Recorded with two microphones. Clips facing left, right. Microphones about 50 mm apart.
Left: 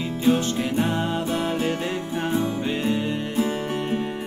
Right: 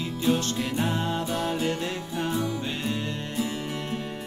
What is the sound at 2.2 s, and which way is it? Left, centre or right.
Music, left.